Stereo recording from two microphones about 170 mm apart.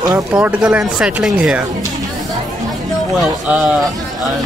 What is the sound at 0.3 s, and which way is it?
Speech, 10° right (ahead or behind).